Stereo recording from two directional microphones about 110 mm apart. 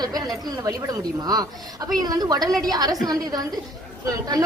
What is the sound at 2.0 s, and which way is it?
A woman's voice, 35° right (ahead or behind).